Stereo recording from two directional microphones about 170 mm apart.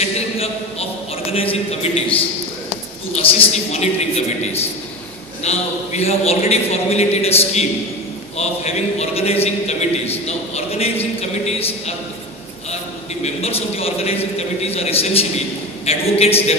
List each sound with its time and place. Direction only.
0.0 s a man's voice: 35° left (ahead or behind)
3.3 s a man's voice: 35° left (ahead or behind)
5.4 s a man's voice: 40° left (ahead or behind)
13.2 s a man's voice: 35° left (ahead or behind)